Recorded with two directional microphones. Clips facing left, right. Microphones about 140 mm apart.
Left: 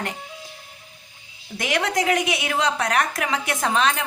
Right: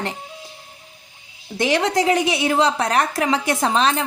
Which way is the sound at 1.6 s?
30° right (ahead or behind).